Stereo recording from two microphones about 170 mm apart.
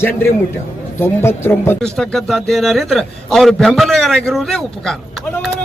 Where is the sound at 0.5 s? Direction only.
15° left (ahead or behind).